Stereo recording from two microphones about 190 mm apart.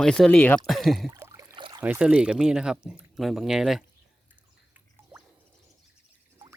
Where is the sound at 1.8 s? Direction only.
5° right (ahead or behind).